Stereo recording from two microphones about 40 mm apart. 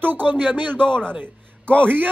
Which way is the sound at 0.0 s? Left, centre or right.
Right.